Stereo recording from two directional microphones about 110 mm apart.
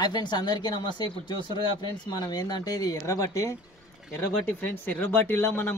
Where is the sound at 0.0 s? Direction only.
40° left (ahead or behind).